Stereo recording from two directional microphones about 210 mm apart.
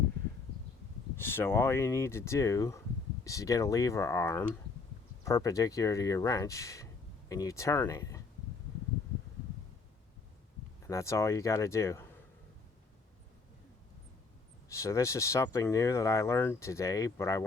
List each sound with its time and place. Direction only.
1.1 s speech: 10° left (ahead or behind)
10.8 s speech: 15° left (ahead or behind)
14.7 s speech: 15° left (ahead or behind)